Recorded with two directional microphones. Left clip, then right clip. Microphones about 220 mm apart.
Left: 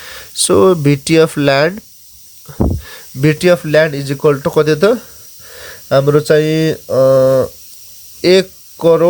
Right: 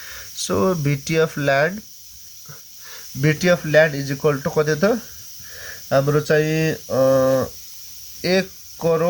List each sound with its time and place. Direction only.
0.0 s speech: 50° left (ahead or behind)
2.8 s speech: 45° left (ahead or behind)